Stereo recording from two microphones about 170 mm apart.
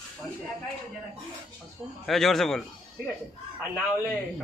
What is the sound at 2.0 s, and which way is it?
Speech, centre (ahead or behind).